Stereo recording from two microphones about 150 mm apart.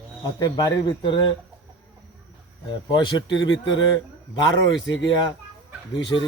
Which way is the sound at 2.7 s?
30° left (ahead or behind).